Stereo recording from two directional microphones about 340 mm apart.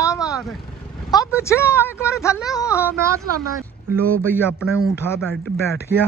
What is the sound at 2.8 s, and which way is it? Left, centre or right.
Speech, centre.